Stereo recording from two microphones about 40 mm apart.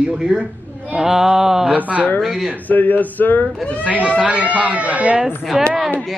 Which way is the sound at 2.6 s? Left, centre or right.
Left.